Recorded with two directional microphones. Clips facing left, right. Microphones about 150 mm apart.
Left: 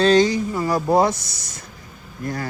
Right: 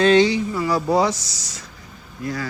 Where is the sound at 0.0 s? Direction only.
40° left (ahead or behind).